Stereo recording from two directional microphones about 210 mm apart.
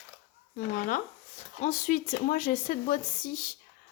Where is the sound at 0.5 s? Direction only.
40° left (ahead or behind).